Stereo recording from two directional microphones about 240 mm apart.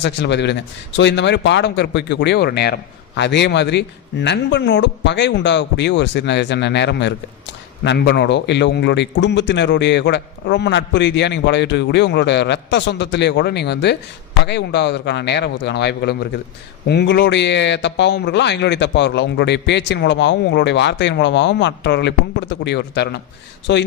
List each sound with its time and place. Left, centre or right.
0.0 s a man's voice: left